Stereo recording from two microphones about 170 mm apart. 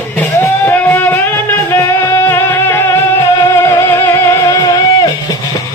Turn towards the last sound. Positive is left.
turn(degrees=20)  # may be behind; listen again after turning